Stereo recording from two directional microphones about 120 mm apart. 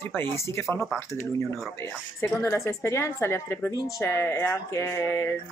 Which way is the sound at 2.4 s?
20° left (ahead or behind).